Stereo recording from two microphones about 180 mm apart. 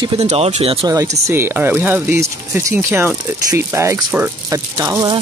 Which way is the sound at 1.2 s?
15° right (ahead or behind).